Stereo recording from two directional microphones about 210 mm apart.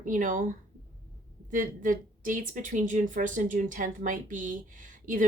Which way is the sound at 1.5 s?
40° right (ahead or behind).